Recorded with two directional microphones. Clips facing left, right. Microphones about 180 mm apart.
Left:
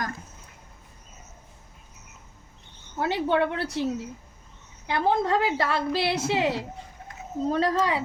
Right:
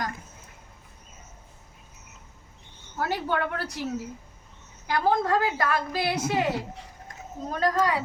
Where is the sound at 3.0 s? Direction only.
25° left (ahead or behind).